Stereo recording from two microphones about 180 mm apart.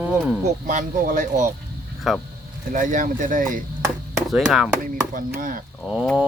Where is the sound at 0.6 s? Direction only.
45° right (ahead or behind).